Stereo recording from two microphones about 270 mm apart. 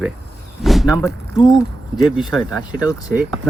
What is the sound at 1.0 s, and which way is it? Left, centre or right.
Speech, centre.